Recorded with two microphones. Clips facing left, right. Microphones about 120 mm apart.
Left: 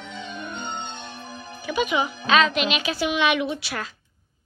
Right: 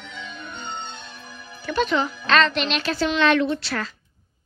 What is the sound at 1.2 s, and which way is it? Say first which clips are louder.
Music: left 4 dB; 25° left (ahead or behind).